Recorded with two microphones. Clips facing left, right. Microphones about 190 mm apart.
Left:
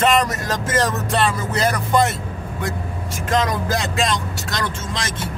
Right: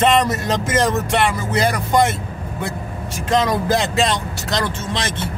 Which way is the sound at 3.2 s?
25° right (ahead or behind).